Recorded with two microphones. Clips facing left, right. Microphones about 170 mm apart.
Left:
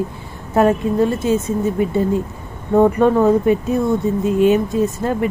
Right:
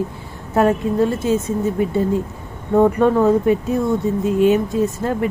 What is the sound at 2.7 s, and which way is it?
Speech, 20° left (ahead or behind).